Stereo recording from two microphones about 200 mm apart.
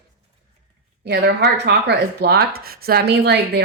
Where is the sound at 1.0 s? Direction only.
60° right (ahead or behind).